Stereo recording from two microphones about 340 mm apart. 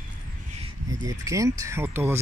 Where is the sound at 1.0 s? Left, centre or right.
Centre.